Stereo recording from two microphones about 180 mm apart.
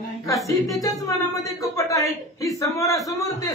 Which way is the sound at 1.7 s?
20° left (ahead or behind).